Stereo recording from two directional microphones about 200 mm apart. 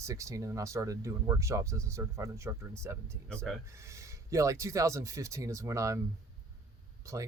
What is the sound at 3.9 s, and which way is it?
Speech, 15° right (ahead or behind).